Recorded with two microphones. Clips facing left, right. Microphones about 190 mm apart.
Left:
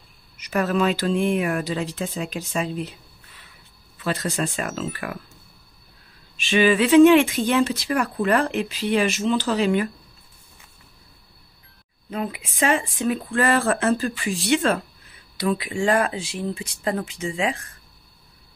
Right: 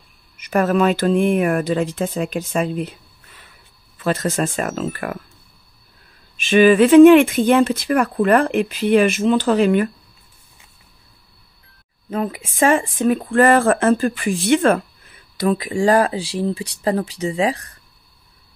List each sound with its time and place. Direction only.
0.4 s speech: 50° right (ahead or behind)
4.0 s speech: 50° right (ahead or behind)
6.3 s speech: 50° right (ahead or behind)
12.1 s speech: 45° right (ahead or behind)